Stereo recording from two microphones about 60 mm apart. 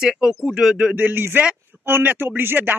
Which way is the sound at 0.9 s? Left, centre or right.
Right.